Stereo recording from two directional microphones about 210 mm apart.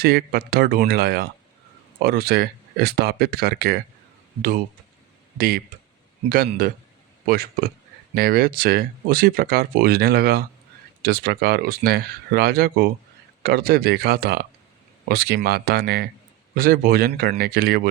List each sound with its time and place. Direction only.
0.0 s speech: 45° right (ahead or behind)
5.4 s speech: 45° right (ahead or behind)